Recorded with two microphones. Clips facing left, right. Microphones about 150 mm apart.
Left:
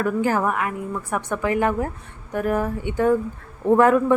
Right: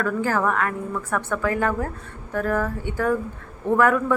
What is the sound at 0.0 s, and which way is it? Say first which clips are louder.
A woman's voice: left 2 dB; 15° left (ahead or behind).